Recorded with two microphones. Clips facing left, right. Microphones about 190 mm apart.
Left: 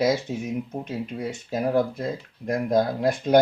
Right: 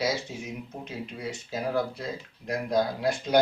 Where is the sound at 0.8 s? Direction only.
55° left (ahead or behind).